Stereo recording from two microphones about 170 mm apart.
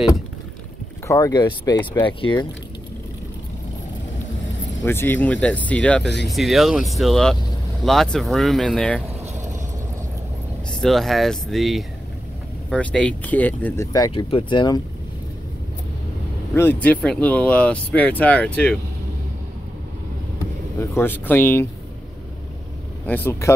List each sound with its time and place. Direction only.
1.0 s speech: 20° left (ahead or behind)
4.8 s speech: 15° left (ahead or behind)
9.0 s vehicle: 40° right (ahead or behind)
10.7 s speech: centre (ahead or behind)
13.9 s speech: 25° left (ahead or behind)
16.5 s speech: 10° left (ahead or behind)
20.9 s speech: 10° left (ahead or behind)
23.0 s speech: 10° left (ahead or behind)